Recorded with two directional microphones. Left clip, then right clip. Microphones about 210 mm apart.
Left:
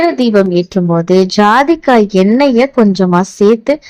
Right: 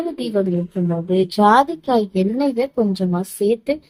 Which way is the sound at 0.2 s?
35° left (ahead or behind).